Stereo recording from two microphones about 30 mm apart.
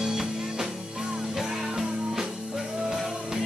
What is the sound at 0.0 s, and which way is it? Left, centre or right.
Music, centre.